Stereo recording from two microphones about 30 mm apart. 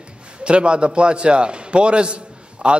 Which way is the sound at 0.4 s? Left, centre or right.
Right.